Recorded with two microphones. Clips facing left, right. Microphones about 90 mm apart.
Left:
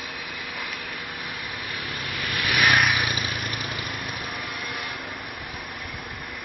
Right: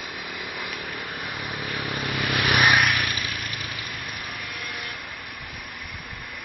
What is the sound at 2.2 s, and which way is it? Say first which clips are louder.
Vehicle: right 3 dB; 70° right (ahead or behind).